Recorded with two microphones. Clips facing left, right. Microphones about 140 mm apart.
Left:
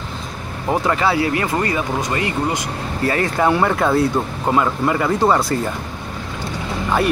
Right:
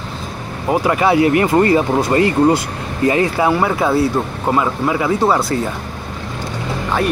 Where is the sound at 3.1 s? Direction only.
10° right (ahead or behind).